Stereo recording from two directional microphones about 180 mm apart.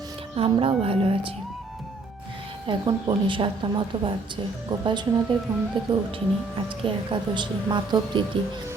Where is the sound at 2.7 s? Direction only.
25° right (ahead or behind).